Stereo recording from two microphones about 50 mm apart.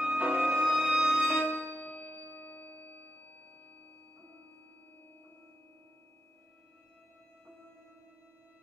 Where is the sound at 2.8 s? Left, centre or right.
Left.